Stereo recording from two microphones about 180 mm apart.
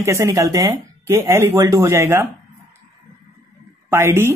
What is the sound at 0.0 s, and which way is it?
Speech, 15° right (ahead or behind).